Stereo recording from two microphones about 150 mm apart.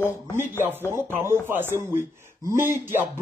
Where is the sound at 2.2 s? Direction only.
20° right (ahead or behind).